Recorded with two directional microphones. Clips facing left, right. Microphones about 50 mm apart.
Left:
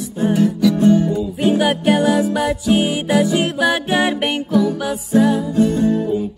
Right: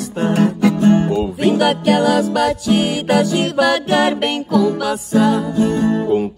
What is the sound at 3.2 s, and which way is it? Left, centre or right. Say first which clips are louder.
Music: right 1 dB; centre.